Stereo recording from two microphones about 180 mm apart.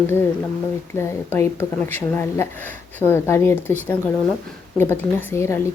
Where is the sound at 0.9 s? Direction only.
15° left (ahead or behind).